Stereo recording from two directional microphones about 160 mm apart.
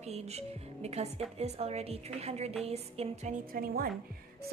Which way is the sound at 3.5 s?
65° right (ahead or behind).